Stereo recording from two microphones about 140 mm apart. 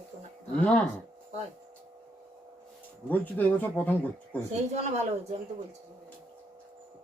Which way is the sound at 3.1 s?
10° left (ahead or behind).